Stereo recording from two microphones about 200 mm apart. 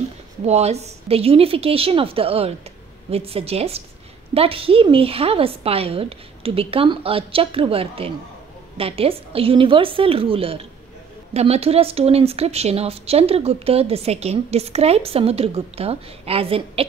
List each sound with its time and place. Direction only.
0.5 s a woman's voice: 30° right (ahead or behind)